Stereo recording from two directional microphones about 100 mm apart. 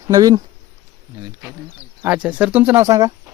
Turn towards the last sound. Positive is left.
turn(degrees=-35)  # may be behind; listen again after turning